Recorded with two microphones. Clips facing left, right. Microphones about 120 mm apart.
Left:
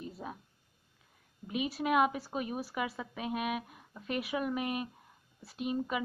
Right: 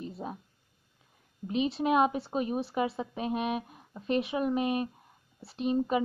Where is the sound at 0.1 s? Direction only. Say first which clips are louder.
Right 4 dB; 25° right (ahead or behind).